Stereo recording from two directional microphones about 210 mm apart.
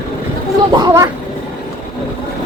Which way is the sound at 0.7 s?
15° right (ahead or behind).